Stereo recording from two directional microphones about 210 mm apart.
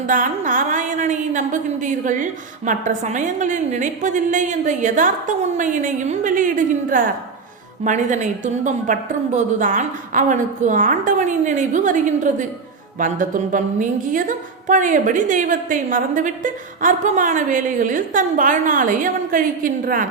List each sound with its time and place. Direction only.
0.1 s a woman's voice: 40° right (ahead or behind)